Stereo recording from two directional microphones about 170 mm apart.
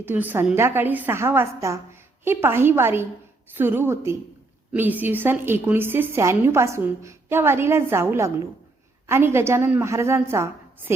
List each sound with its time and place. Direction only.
0.0 s a woman's voice: 10° right (ahead or behind)